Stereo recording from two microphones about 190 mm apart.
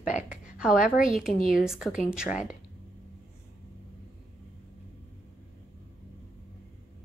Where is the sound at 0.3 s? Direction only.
5° right (ahead or behind).